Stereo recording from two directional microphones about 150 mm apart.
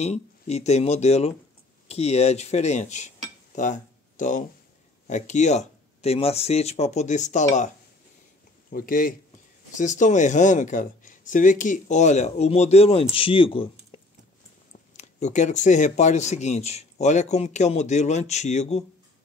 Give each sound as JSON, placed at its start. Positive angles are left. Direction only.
{"t": 0.0, "sound": "speech", "side_deg": 45}
{"t": 8.6, "sound": "a man's voice", "side_deg": 70}
{"t": 9.8, "sound": "speech", "side_deg": 55}
{"t": 15.0, "sound": "speech", "side_deg": 50}